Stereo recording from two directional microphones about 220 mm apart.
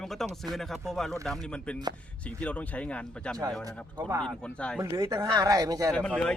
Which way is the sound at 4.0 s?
15° right (ahead or behind).